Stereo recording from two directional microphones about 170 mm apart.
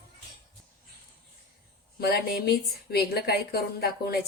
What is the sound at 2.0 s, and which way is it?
A woman's voice, 70° left (ahead or behind).